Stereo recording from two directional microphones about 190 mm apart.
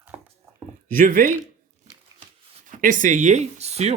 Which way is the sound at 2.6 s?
45° right (ahead or behind).